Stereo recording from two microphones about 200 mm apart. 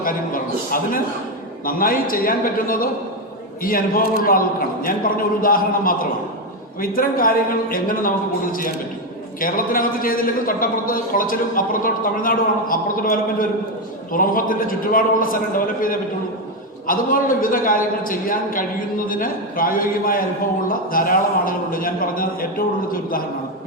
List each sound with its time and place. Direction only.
0.0 s a man's voice: 45° left (ahead or behind)
9.4 s a man's voice: 45° left (ahead or behind)